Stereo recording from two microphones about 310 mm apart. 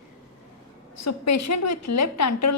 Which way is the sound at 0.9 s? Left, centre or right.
Left.